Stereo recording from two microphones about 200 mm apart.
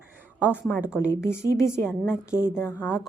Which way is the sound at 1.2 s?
10° left (ahead or behind).